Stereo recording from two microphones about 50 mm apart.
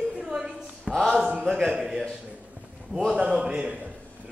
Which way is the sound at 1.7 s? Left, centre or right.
Centre.